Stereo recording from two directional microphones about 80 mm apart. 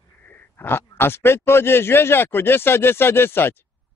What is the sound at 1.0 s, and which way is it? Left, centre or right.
Speech, left.